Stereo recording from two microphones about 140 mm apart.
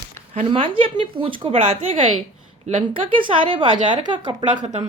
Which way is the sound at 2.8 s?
40° right (ahead or behind).